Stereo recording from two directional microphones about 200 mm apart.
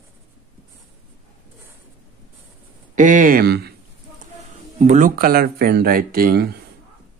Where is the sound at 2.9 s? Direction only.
40° right (ahead or behind).